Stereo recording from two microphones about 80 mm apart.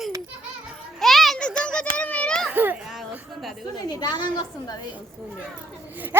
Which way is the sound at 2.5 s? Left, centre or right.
Right.